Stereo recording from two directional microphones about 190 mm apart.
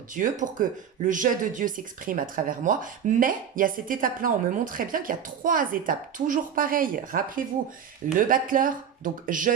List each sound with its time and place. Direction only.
0.1 s speech: 45° right (ahead or behind)